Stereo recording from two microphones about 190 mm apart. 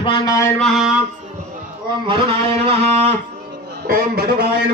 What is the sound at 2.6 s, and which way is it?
Speech, 30° right (ahead or behind).